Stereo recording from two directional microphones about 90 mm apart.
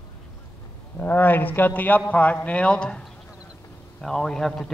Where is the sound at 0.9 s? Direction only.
20° left (ahead or behind).